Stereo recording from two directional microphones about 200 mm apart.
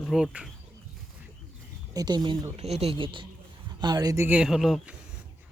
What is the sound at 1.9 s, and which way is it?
Speech, 20° right (ahead or behind).